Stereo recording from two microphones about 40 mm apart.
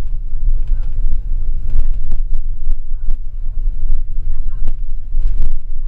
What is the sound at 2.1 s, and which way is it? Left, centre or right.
Throbbing, centre.